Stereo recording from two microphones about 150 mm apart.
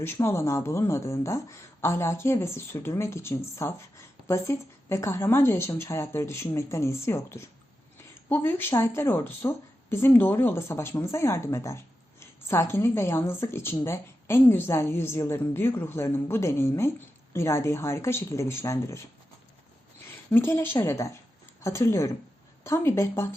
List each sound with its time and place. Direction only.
0.0 s speech: 15° left (ahead or behind)
20.3 s speech: 15° left (ahead or behind)